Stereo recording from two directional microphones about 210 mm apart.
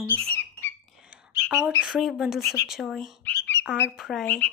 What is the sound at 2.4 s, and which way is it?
Speech, 15° left (ahead or behind).